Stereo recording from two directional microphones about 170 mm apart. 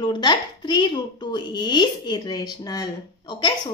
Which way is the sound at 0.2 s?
25° left (ahead or behind).